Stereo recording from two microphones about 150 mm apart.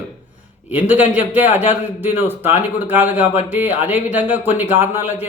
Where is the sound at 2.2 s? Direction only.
15° right (ahead or behind).